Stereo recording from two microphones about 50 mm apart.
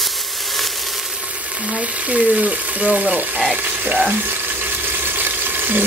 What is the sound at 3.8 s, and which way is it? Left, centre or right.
Frying, right.